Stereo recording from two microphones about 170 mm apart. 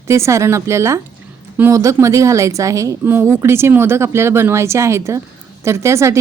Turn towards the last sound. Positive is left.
turn(degrees=-15)  # may be behind; listen again after turning